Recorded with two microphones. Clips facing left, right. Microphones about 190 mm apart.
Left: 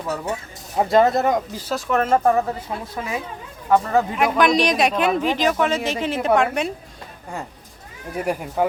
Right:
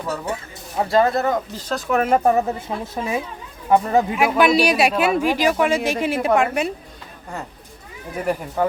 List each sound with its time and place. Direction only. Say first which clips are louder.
0.8 s speech: left 1 dB; 20° left (ahead or behind)
1.9 s a woman's voice: right 1 dB; 10° right (ahead or behind)
4.1 s a man's voice: right 1 dB; 5° right (ahead or behind)
8.3 s speech: right 1 dB; 10° left (ahead or behind)